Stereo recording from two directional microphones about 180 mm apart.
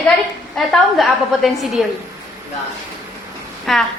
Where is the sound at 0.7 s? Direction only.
Centre (ahead or behind).